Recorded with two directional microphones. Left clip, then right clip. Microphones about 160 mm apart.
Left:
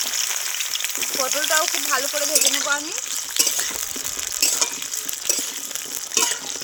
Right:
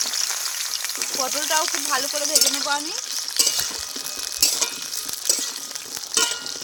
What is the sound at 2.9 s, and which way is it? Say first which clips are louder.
Stir: even; 25° left (ahead or behind).